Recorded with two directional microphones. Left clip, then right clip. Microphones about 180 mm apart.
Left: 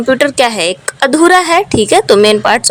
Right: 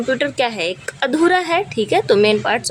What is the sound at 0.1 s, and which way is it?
A woman's voice, 25° left (ahead or behind).